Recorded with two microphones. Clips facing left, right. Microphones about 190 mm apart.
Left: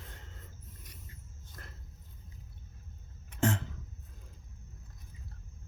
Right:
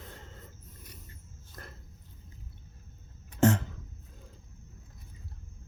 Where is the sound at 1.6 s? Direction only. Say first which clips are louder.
Right 5 dB; 45° right (ahead or behind).